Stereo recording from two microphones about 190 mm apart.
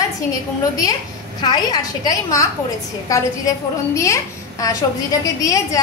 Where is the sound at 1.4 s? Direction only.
20° left (ahead or behind).